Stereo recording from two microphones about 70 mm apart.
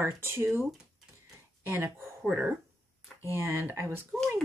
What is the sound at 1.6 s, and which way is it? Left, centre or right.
Speech, right.